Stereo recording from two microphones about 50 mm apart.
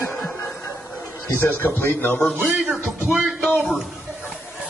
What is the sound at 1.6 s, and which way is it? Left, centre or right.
Speech, left.